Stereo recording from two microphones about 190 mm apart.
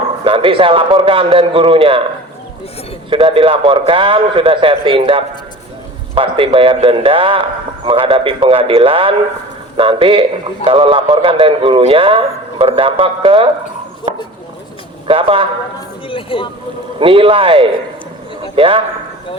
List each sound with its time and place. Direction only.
0.3 s a man's voice: 30° right (ahead or behind)
3.1 s a man's voice: 30° right (ahead or behind)
15.0 s a man's voice: 30° right (ahead or behind)
16.0 s speech: 25° left (ahead or behind)
17.0 s a man's voice: 25° right (ahead or behind)